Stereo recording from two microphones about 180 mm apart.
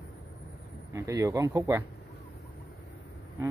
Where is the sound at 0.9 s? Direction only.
15° right (ahead or behind).